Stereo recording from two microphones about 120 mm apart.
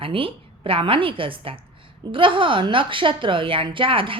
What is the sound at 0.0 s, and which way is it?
A woman's voice, 50° right (ahead or behind).